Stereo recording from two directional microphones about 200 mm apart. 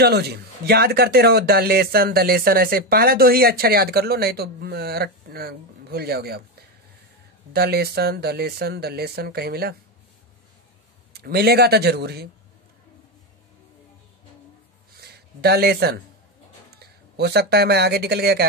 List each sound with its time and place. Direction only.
0.0 s speech: 55° right (ahead or behind)
7.5 s speech: 50° right (ahead or behind)
11.1 s speech: 50° right (ahead or behind)
15.0 s speech: 55° right (ahead or behind)